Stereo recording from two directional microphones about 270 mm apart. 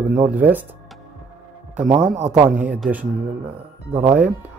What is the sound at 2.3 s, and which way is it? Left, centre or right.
Speech, centre.